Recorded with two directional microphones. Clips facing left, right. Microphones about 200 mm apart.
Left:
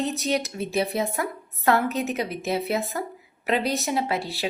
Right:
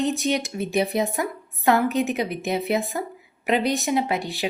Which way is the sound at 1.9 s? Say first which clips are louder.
Right 4 dB; 35° left (ahead or behind).